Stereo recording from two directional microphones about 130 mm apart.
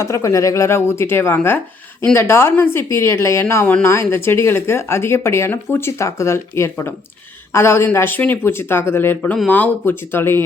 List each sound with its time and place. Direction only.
0.0 s speech: 25° left (ahead or behind)